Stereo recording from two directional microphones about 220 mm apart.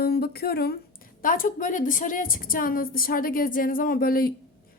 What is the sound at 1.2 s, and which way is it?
Speech, 40° left (ahead or behind).